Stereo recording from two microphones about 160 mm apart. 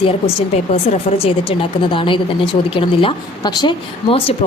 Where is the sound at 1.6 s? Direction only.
30° left (ahead or behind).